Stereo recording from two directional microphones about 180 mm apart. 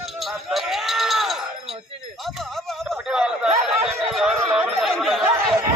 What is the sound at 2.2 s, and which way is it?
Chatter, centre (ahead or behind).